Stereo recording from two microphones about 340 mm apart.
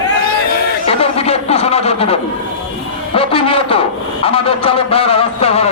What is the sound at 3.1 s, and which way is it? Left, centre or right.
A man's voice, centre.